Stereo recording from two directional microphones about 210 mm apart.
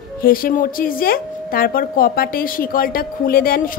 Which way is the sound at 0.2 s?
45° left (ahead or behind).